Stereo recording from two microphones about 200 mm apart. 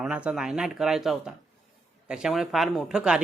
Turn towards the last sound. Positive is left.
turn(degrees=-5)  # may be behind; listen again after turning